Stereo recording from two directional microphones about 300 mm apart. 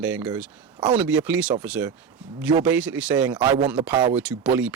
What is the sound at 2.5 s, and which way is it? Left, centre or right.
Speech, centre.